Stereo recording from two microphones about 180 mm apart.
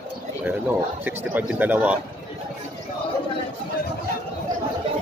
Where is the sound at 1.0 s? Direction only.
10° right (ahead or behind).